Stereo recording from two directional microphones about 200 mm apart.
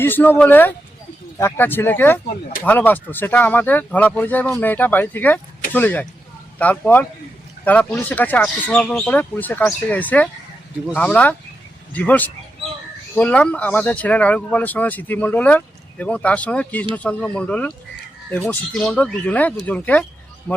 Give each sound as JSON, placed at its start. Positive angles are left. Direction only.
{"t": 0.0, "sound": "speech", "side_deg": 10}